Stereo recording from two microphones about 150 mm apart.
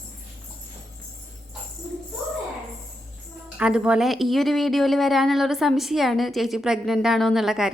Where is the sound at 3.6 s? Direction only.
5° right (ahead or behind).